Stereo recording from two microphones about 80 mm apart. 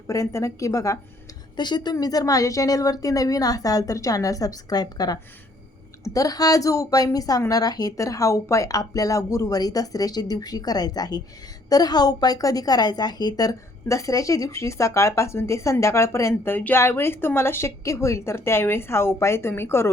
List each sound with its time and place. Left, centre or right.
0.1 s a woman's voice: left
1.5 s a woman's voice: left